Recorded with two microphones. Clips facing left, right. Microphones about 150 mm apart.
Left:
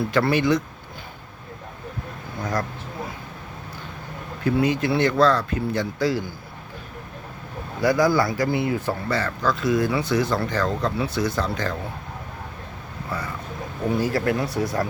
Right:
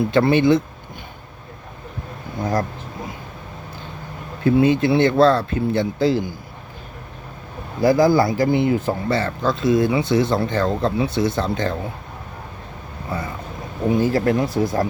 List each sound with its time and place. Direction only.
0.0 s speech: 25° right (ahead or behind)
2.4 s speech: 25° right (ahead or behind)
4.4 s speech: 25° right (ahead or behind)
7.8 s speech: 25° right (ahead or behind)
13.1 s boat: 25° right (ahead or behind)
13.9 s speech: 20° right (ahead or behind)